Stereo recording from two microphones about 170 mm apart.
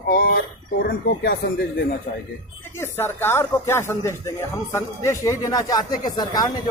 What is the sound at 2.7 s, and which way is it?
Speech, 15° left (ahead or behind).